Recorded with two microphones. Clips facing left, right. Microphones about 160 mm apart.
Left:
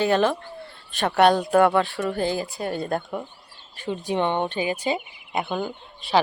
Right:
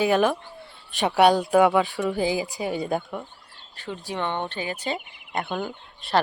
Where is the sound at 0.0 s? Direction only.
10° right (ahead or behind).